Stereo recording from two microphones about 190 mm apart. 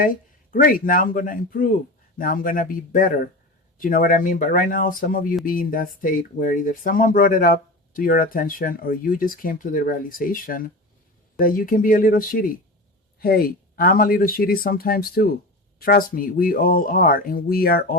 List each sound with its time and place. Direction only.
0.0 s speech: 45° left (ahead or behind)